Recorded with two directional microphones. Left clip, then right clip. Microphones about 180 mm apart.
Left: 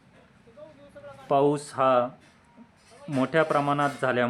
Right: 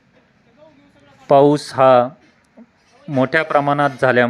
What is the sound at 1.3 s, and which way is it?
Speech, 30° right (ahead or behind).